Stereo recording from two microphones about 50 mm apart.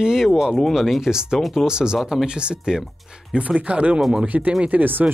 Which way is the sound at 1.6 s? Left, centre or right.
Centre.